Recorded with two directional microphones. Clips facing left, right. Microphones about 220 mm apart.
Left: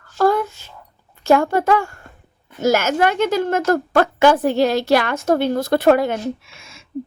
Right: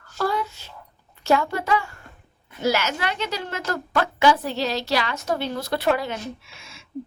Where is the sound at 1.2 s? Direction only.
50° left (ahead or behind).